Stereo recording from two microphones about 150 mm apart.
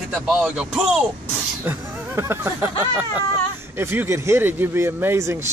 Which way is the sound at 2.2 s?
15° right (ahead or behind).